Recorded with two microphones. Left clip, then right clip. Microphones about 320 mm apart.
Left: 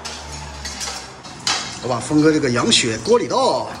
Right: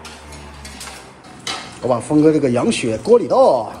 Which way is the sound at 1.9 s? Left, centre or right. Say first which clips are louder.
Right 3 dB; centre.